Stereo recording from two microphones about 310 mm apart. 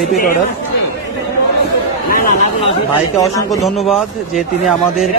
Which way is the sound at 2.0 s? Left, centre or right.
Left.